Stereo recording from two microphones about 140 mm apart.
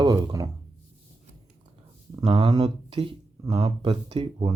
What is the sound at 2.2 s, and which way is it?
Speech, 40° right (ahead or behind).